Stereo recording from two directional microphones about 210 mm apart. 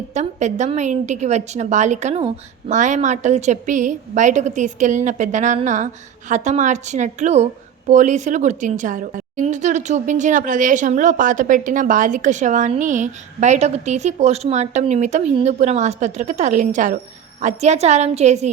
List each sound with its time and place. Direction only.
0.1 s a woman's voice: 35° right (ahead or behind)